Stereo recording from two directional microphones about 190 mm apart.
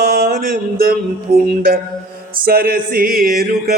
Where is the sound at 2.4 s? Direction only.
50° right (ahead or behind).